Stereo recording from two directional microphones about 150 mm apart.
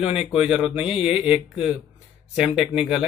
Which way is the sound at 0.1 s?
40° left (ahead or behind).